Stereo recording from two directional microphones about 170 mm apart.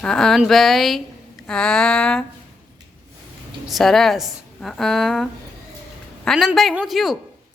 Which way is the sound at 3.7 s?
Centre (ahead or behind).